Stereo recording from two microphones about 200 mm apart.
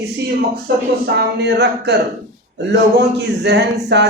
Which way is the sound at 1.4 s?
55° right (ahead or behind).